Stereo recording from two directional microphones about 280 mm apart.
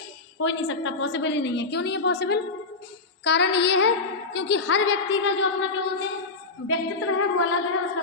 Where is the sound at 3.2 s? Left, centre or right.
Left.